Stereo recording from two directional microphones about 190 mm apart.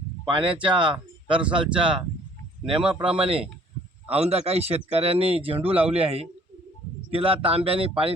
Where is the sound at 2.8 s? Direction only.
5° right (ahead or behind).